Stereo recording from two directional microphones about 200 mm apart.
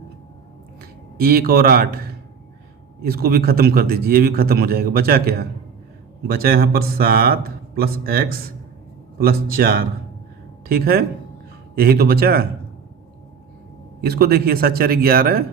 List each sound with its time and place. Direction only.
0.8 s speech: 50° right (ahead or behind)
3.0 s a man's voice: 50° right (ahead or behind)
14.0 s a man's voice: 50° right (ahead or behind)